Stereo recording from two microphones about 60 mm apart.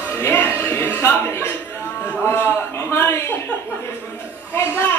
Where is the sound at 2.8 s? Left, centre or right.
Left.